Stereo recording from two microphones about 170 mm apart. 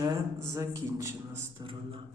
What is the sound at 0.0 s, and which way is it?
Speech, 20° right (ahead or behind).